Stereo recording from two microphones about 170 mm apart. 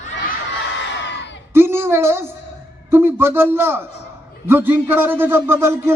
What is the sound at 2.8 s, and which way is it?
A man's voice, 15° right (ahead or behind).